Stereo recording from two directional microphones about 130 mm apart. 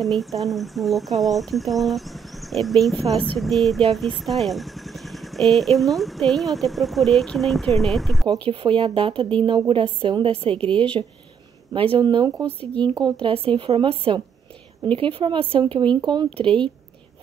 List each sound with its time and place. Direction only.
0.0 s speech: centre (ahead or behind)
8.5 s a woman's voice: 45° right (ahead or behind)
10.7 s a woman's voice: 10° left (ahead or behind)
11.7 s a woman's voice: 45° right (ahead or behind)